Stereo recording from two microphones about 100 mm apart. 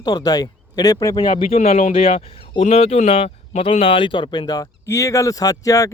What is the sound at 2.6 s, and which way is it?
Speech, 90° left.